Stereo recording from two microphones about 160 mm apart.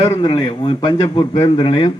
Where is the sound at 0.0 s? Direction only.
25° left (ahead or behind).